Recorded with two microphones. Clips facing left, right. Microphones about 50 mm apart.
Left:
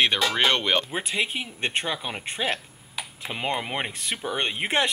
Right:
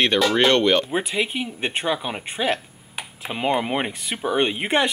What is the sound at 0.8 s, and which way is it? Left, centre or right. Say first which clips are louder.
A man's voice: right 4 dB; centre.